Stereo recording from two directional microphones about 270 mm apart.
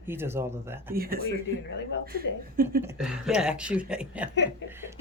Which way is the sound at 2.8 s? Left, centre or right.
Centre.